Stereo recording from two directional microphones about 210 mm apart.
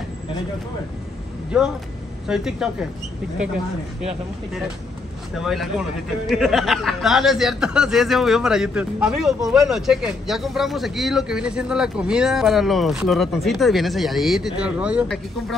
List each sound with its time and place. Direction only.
1.5 s speech: 5° right (ahead or behind)
5.3 s speech: centre (ahead or behind)